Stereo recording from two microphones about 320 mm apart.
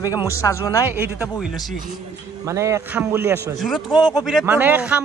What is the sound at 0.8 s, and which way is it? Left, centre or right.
A man's voice, centre.